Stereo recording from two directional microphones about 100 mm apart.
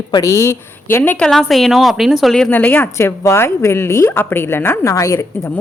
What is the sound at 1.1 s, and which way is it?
A woman's voice, 10° left (ahead or behind).